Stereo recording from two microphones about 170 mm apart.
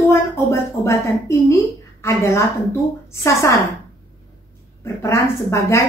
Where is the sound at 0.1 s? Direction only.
15° left (ahead or behind).